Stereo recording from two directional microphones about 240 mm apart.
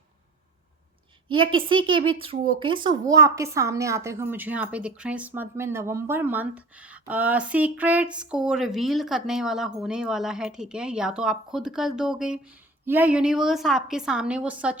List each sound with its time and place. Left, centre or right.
1.3 s a woman's voice: right; by 14.8 s centre